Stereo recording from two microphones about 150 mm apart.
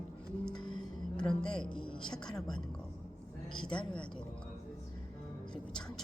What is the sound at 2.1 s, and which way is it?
Speech, 5° left (ahead or behind).